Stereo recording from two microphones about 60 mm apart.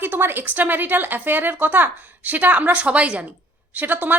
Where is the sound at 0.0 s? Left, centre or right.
Right.